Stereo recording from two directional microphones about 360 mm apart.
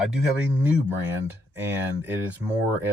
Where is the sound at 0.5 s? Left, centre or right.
Centre.